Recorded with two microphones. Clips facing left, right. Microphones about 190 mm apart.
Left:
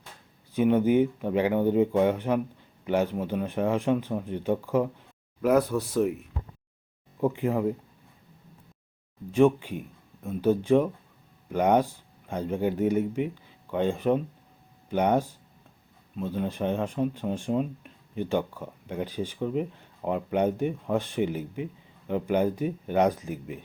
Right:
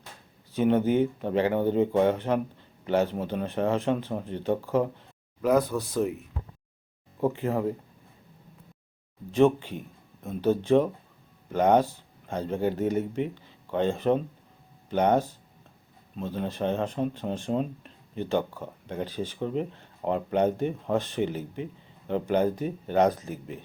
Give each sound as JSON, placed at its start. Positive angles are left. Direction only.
{"t": 0.5, "sound": "speech", "side_deg": 10}
{"t": 7.3, "sound": "speech", "side_deg": 10}
{"t": 9.3, "sound": "speech", "side_deg": 10}